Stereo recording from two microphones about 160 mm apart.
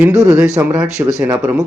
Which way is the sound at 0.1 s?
20° right (ahead or behind).